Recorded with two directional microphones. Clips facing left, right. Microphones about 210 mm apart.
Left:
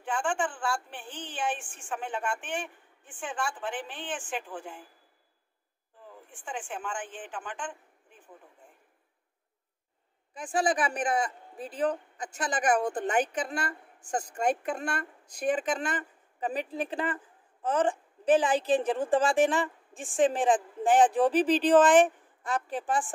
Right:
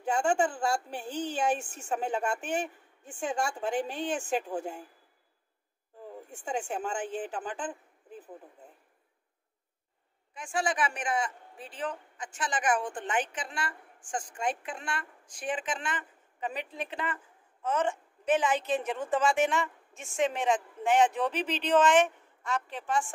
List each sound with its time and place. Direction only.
0.0 s a woman's voice: 40° right (ahead or behind)
6.2 s a man's voice: 40° right (ahead or behind)
10.3 s a woman's voice: 35° left (ahead or behind)